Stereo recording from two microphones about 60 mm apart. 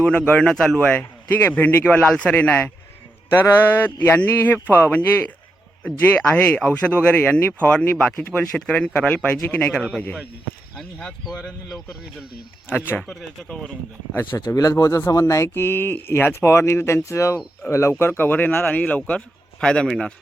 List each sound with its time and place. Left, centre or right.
0.0 s a man's voice: left
0.4 s speech: centre
0.8 s a man's voice: left
3.8 s a man's voice: left
12.6 s speech: left
14.3 s speech: left
15.5 s speech: left
18.0 s a man's voice: left; by 19.9 s centre